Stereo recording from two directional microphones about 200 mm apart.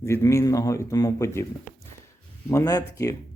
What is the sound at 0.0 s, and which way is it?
Speech, 15° left (ahead or behind).